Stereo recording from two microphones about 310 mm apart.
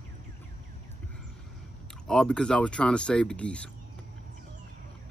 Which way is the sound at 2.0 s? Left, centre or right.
Centre.